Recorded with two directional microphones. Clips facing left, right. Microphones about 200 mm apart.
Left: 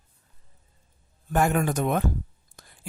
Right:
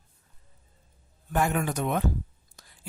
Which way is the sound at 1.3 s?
45° left (ahead or behind).